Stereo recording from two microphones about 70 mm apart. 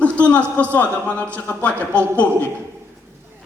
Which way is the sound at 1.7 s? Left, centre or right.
Right.